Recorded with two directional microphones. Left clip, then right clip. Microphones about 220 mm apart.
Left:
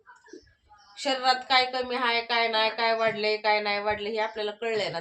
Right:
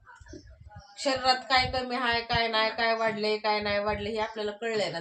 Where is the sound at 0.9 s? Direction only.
15° left (ahead or behind).